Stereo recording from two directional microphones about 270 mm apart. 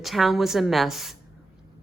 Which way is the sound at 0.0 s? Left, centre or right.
Centre.